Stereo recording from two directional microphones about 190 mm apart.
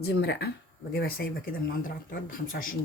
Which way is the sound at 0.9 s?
55° left (ahead or behind).